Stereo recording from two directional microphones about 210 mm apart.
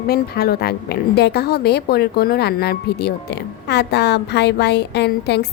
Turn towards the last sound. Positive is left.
turn(degrees=50)  # may be behind; listen again after turning